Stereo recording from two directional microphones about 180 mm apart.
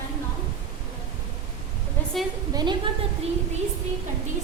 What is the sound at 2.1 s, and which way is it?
Speech, centre (ahead or behind).